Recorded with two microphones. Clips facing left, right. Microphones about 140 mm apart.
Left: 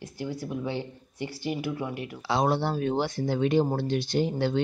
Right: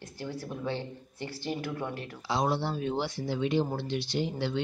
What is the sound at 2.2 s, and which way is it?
Speech, 65° left (ahead or behind).